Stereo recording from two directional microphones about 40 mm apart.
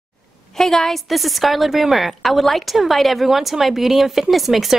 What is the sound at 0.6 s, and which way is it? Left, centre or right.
A woman's voice, centre.